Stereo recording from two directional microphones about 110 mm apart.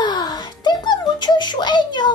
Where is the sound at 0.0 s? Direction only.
40° left (ahead or behind).